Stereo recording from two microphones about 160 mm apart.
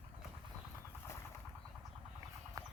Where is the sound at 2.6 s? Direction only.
20° right (ahead or behind).